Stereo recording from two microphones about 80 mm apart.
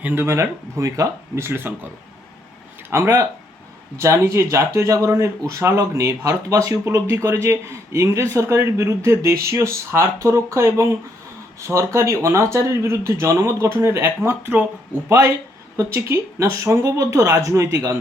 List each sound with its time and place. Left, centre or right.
0.0 s speech: right
2.9 s speech: right
15.8 s speech: right